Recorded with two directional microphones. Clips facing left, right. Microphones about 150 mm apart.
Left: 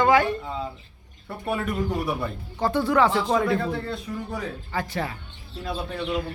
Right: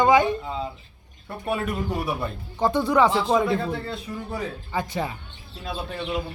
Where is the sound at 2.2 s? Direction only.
20° right (ahead or behind).